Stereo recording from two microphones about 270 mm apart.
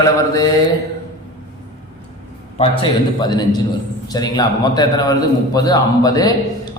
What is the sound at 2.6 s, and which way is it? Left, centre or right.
A man's voice, centre.